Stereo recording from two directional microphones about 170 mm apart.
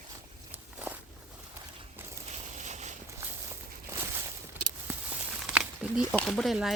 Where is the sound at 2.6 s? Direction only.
45° right (ahead or behind).